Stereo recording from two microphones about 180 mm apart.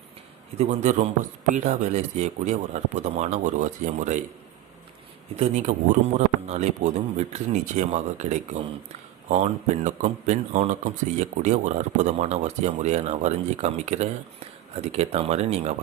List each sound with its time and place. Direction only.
0.6 s speech: 40° right (ahead or behind)
5.4 s speech: 40° right (ahead or behind)